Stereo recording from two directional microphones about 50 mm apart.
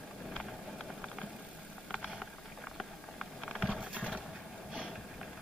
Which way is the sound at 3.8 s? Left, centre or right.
Right.